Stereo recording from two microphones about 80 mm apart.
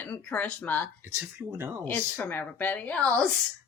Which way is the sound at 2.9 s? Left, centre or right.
Centre.